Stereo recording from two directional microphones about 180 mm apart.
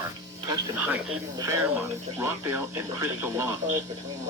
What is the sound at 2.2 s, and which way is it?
Speech, 15° right (ahead or behind).